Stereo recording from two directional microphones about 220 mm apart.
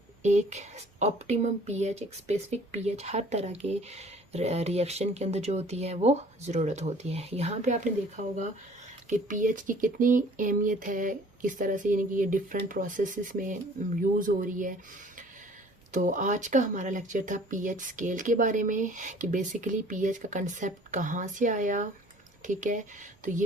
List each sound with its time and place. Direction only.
0.2 s speech: 30° right (ahead or behind)
16.0 s speech: 35° right (ahead or behind)